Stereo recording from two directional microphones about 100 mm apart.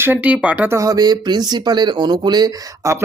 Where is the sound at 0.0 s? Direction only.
20° right (ahead or behind).